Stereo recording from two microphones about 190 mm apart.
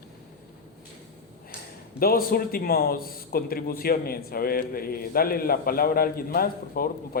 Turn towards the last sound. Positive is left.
turn(degrees=50)  # may be behind; listen again after turning